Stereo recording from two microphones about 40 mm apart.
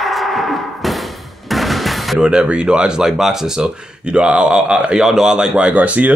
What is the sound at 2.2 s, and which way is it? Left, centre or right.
Speech, right.